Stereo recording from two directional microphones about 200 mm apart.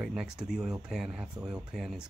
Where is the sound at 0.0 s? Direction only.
5° right (ahead or behind).